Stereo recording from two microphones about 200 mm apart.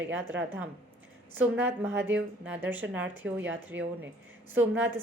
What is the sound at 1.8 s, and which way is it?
A woman's voice, 10° right (ahead or behind).